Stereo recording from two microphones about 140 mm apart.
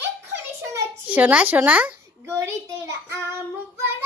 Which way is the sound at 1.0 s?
10° right (ahead or behind).